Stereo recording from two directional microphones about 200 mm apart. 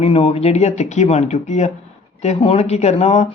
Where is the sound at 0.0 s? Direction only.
30° left (ahead or behind).